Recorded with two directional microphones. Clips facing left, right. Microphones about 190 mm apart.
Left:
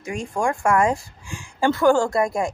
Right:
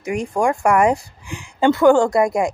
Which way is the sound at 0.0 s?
20° right (ahead or behind).